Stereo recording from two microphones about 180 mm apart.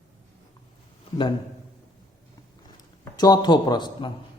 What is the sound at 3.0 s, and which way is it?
A man's voice, 20° left (ahead or behind).